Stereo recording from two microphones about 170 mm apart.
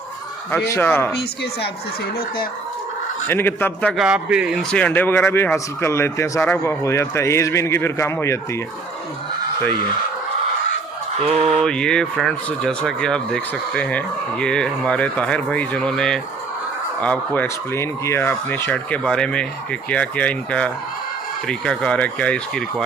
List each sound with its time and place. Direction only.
0.5 s speech: 10° left (ahead or behind)
1.1 s a woman's voice: 75° left (ahead or behind)
3.2 s speech: 10° left (ahead or behind)
4.0 s speech: 5° right (ahead or behind)
4.7 s speech: 5° left (ahead or behind)
11.2 s fowl: 40° right (ahead or behind)
11.6 s speech: 5° left (ahead or behind)